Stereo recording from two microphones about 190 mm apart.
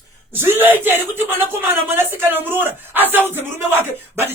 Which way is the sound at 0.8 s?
10° right (ahead or behind).